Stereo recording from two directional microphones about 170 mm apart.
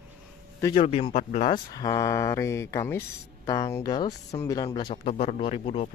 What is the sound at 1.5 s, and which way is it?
Speech, 25° left (ahead or behind).